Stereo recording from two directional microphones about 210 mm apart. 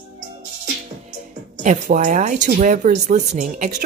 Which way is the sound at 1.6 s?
35° right (ahead or behind).